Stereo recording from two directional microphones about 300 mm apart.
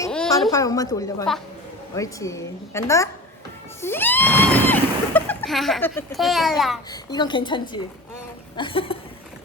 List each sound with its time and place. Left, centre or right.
0.0 s a woman's voice: centre
6.9 s a woman's voice: centre